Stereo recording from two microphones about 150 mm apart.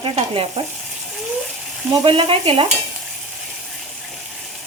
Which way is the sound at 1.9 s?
35° right (ahead or behind).